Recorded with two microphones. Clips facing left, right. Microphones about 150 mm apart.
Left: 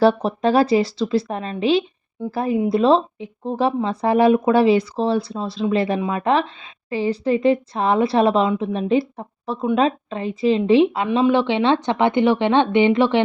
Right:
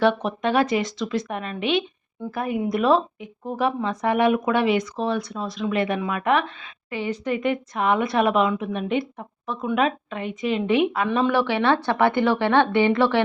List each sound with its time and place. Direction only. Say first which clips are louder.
0.0 s a woman's voice: left 4 dB; 35° left (ahead or behind); by 13.2 s 20° left (ahead or behind)